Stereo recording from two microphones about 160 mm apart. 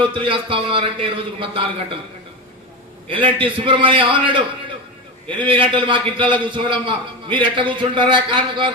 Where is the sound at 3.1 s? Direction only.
35° right (ahead or behind).